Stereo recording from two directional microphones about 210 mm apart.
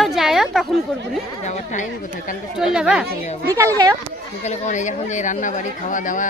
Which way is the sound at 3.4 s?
15° right (ahead or behind).